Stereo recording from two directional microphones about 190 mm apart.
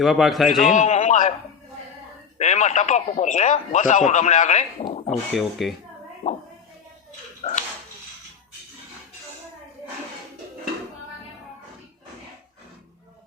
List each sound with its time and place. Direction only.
0.0 s a man's voice: centre (ahead or behind)
0.6 s a man's voice: 40° left (ahead or behind)
2.4 s speech: 35° left (ahead or behind)
5.3 s a man's voice: centre (ahead or behind)
6.2 s a sound: 35° left (ahead or behind)
7.4 s a sound: 35° left (ahead or behind)